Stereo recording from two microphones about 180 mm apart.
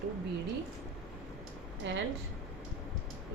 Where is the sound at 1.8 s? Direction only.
90° right.